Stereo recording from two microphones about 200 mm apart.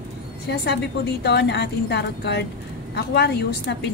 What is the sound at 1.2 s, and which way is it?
A woman's voice, 55° left (ahead or behind).